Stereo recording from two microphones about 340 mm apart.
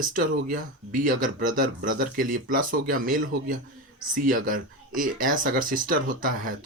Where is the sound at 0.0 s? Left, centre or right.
Right.